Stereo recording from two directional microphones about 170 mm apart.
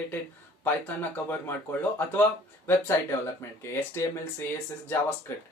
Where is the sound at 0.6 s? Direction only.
10° left (ahead or behind).